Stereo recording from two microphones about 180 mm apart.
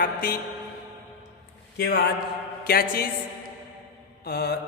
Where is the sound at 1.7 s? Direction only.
65° left (ahead or behind).